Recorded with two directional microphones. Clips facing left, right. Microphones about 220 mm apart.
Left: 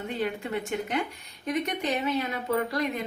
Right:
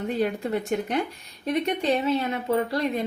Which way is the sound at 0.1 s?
40° right (ahead or behind).